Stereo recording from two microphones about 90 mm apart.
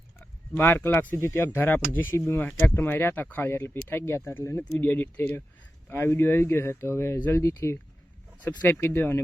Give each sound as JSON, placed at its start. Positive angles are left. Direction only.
{"t": 0.5, "sound": "speech", "side_deg": 20}